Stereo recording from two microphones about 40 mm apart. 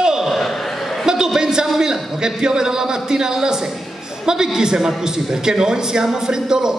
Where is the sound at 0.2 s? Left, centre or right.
Centre.